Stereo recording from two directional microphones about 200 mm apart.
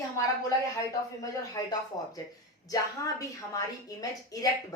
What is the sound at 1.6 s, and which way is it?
A woman's voice, 15° left (ahead or behind).